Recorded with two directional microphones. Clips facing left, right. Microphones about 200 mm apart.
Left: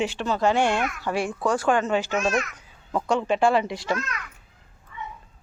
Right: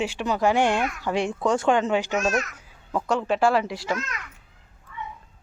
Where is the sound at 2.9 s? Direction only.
Centre (ahead or behind).